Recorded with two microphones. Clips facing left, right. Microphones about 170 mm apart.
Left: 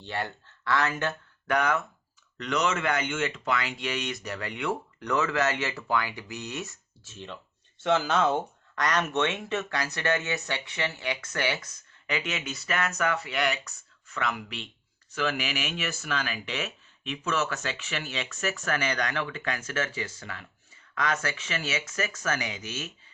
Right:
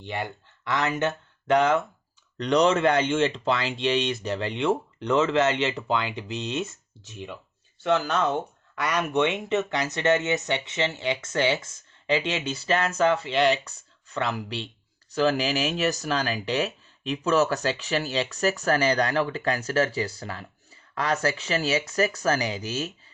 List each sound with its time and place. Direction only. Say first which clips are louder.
0.0 s speech: right 2 dB; 15° right (ahead or behind)
7.8 s speech: right 1 dB; centre (ahead or behind); by 22.9 s 35° right (ahead or behind)